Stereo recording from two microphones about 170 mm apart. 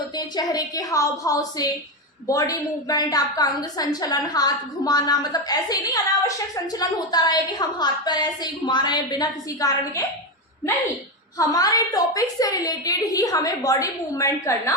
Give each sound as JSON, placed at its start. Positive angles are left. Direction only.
{"t": 0.2, "sound": "a woman's voice", "side_deg": 20}
{"t": 11.3, "sound": "a woman's voice", "side_deg": 20}